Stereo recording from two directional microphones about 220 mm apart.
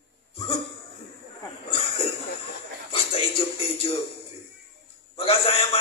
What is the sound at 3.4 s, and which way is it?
Music, 25° left (ahead or behind).